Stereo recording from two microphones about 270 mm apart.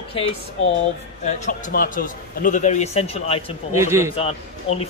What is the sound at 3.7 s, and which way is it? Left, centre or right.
Speech, centre.